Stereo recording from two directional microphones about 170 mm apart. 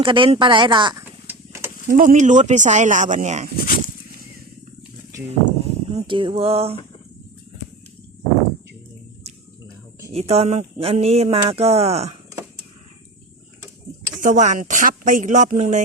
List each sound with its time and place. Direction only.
0.0 s speech: 30° right (ahead or behind)
1.3 s a sound: 15° right (ahead or behind)
1.9 s speech: 50° right (ahead or behind)
5.3 s a sound: 40° right (ahead or behind)
10.1 s speech: 35° right (ahead or behind)
14.2 s speech: 50° right (ahead or behind)